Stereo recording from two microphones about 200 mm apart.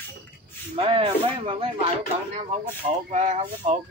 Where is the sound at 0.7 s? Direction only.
30° right (ahead or behind).